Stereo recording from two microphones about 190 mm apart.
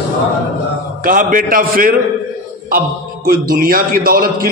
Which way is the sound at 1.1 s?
45° right (ahead or behind).